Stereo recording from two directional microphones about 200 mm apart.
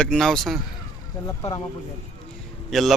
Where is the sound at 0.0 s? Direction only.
5° left (ahead or behind).